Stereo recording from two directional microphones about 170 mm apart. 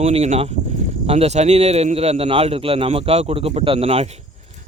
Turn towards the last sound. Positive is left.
turn(degrees=-35)  # may be behind; listen again after turning